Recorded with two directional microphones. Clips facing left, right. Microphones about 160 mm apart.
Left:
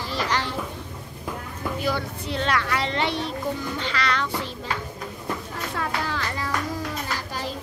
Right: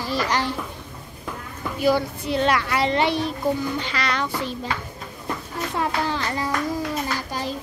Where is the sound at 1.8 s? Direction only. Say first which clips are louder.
Right 9 dB; 10° right (ahead or behind).